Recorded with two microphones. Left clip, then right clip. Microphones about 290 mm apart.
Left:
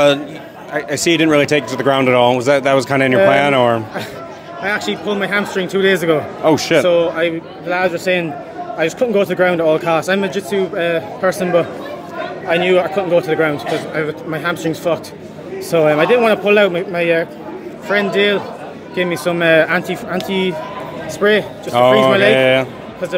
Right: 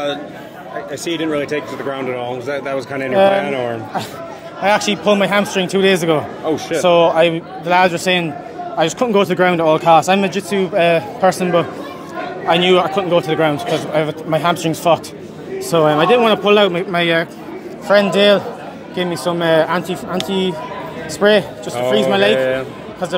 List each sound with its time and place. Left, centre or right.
0.7 s speech: left
3.3 s speech: left
4.6 s a man's voice: right; by 6.2 s centre
6.4 s speech: left
6.8 s a man's voice: right
15.7 s speech: centre
16.9 s a man's voice: right
18.9 s speech: centre
21.2 s a man's voice: centre
22.3 s speech: left